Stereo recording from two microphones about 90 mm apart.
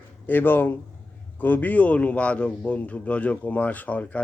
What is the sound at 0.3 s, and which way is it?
Speech, 20° left (ahead or behind).